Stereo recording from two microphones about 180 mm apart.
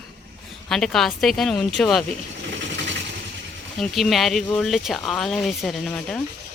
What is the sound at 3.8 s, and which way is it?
Speech, centre (ahead or behind).